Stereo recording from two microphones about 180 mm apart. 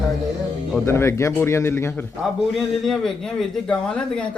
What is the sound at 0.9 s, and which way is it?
Speech, 15° left (ahead or behind).